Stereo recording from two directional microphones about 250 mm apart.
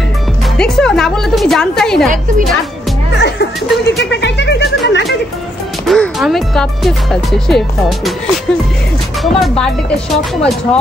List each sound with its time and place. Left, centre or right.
0.6 s music: centre
3.2 s speech: left
5.9 s speech: centre
9.2 s speech: centre